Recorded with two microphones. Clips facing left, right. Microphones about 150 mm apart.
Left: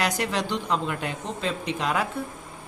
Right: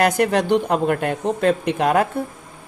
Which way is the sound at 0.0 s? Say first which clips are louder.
Right 9 dB; 55° right (ahead or behind).